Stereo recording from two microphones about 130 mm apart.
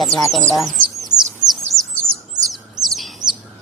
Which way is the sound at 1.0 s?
Centre (ahead or behind).